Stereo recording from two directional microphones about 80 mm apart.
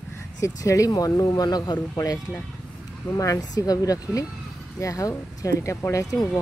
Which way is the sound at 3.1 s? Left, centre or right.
Left.